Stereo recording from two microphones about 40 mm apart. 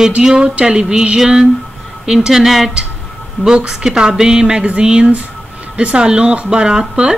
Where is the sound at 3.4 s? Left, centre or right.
Centre.